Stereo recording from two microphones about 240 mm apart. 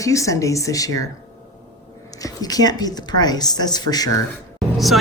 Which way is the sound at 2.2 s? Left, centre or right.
Centre.